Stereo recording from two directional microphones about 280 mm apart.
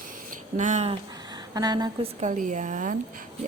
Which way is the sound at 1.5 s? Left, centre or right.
Centre.